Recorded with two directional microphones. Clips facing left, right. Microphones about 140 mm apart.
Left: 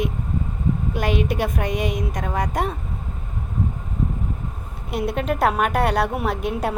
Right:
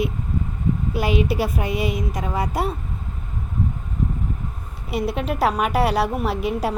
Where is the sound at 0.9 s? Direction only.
5° right (ahead or behind).